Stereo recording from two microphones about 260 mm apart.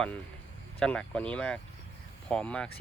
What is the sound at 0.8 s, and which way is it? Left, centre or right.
Speech, centre.